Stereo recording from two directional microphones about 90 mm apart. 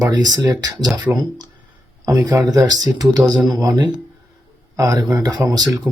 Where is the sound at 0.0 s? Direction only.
45° right (ahead or behind).